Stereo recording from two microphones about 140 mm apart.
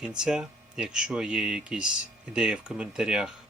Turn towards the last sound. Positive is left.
turn(degrees=-5)  # may be behind; listen again after turning